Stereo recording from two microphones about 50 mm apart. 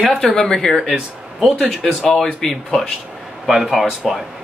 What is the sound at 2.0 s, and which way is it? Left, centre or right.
Speech, centre.